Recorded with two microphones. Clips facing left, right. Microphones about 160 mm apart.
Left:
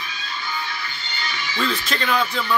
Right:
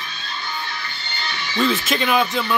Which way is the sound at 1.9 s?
15° right (ahead or behind).